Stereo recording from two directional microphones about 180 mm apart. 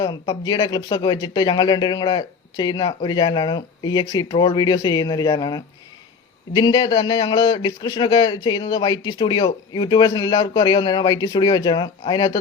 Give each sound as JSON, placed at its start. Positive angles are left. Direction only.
{"t": 0.0, "sound": "a man's voice", "side_deg": 20}